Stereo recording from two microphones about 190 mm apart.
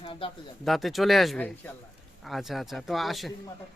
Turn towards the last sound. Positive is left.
turn(degrees=0)  # may be behind; listen again after turning